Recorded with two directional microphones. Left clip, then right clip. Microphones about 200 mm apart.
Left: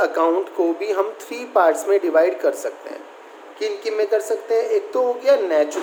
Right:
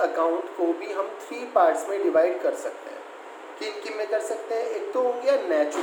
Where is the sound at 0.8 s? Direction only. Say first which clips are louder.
Left 8 dB; 50° left (ahead or behind).